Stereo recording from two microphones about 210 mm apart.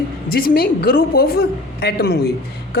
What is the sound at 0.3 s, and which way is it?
A woman's voice, 45° left (ahead or behind).